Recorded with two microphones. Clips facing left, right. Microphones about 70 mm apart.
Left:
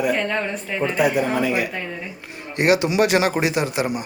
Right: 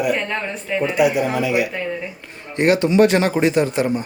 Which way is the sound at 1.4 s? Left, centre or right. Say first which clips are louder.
Right 2 dB; left.